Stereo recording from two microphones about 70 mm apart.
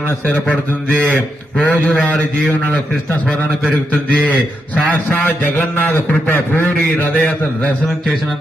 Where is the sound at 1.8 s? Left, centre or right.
Left.